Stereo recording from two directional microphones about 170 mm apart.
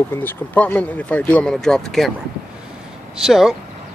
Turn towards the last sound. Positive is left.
turn(degrees=0)  # may be behind; listen again after turning